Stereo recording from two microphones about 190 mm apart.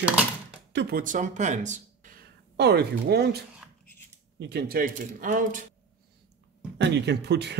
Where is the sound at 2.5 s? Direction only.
60° right (ahead or behind); by 5.7 s 45° right (ahead or behind).